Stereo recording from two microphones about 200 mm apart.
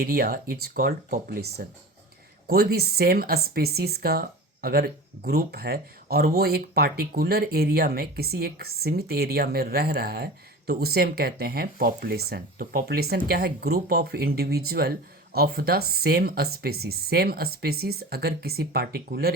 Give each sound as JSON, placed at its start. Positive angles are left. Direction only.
{"t": 0.0, "sound": "speech", "side_deg": -45}